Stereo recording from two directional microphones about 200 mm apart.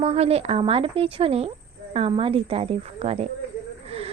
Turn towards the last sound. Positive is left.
turn(degrees=-30)  # may be behind; listen again after turning